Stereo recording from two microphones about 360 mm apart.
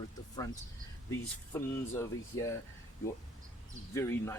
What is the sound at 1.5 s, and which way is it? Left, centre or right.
Speech, centre.